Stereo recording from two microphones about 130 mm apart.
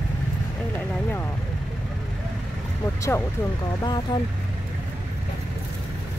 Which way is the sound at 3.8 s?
35° left (ahead or behind).